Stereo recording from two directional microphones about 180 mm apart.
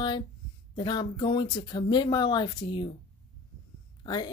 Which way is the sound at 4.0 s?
25° left (ahead or behind).